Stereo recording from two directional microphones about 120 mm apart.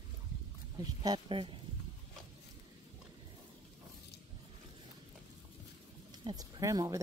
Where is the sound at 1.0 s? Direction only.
40° right (ahead or behind).